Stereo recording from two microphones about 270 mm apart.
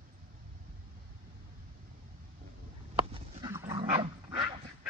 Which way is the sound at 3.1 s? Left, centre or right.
Centre.